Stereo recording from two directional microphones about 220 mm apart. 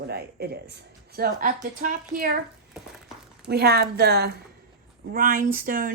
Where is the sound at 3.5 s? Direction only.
45° right (ahead or behind).